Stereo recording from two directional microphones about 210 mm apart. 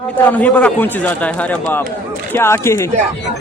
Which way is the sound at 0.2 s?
10° left (ahead or behind).